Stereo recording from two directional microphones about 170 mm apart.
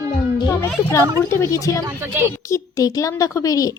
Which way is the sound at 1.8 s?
15° right (ahead or behind).